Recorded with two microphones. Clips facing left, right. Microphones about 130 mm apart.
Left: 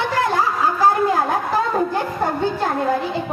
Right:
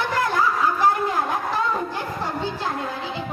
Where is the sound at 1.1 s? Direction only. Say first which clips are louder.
Left 4 dB; 35° left (ahead or behind).